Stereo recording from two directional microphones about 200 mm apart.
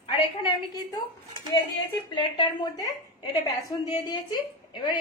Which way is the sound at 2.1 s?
25° left (ahead or behind).